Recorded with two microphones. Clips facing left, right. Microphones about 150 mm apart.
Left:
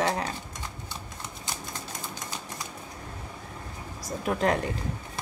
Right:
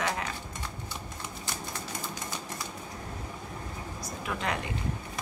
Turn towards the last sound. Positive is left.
turn(degrees=40)  # may be behind; listen again after turning